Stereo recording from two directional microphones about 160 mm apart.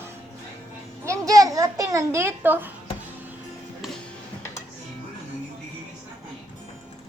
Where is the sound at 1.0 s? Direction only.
20° right (ahead or behind).